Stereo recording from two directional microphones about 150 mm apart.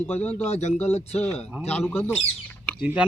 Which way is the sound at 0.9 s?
45° left (ahead or behind).